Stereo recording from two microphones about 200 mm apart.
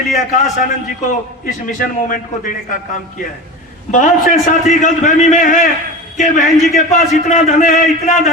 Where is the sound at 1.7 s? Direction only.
40° left (ahead or behind).